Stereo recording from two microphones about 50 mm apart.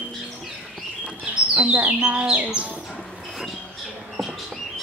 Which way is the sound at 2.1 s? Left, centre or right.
Right.